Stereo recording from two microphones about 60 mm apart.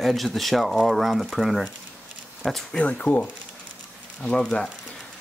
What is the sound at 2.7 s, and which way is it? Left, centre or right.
Speech, left.